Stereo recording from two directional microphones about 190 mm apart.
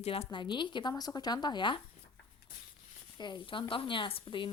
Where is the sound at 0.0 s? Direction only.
30° left (ahead or behind).